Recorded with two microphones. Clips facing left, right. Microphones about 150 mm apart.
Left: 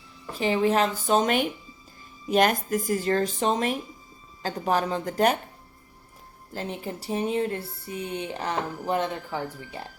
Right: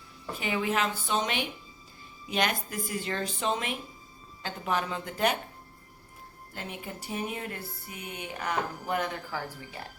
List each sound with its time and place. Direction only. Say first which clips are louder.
0.3 s speech: left 7 dB; 35° left (ahead or behind)
6.5 s speech: left 7 dB; 30° left (ahead or behind)